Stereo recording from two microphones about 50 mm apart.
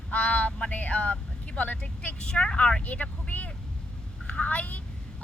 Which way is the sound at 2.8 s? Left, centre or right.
Left.